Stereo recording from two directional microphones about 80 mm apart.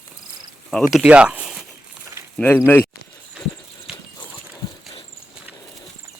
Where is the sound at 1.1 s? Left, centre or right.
Centre.